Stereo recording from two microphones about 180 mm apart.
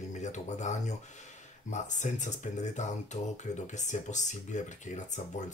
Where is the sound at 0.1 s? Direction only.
40° left (ahead or behind).